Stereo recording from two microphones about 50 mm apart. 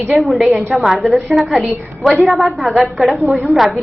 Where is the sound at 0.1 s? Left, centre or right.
Centre.